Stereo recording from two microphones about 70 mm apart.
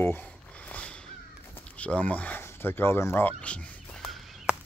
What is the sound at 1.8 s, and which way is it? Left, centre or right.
Speech, centre.